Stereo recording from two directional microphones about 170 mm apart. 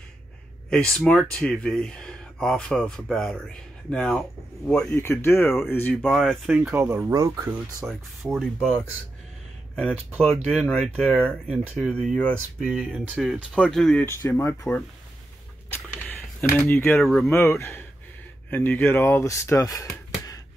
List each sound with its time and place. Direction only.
0.7 s speech: 5° left (ahead or behind)
6.1 s speech: centre (ahead or behind)
8.4 s speech: centre (ahead or behind)
9.8 s speech: 5° right (ahead or behind)
14.0 s speech: 15° left (ahead or behind)
15.7 s a sound: 10° left (ahead or behind)
16.5 s speech: 10° left (ahead or behind)
17.3 s speech: 15° left (ahead or behind)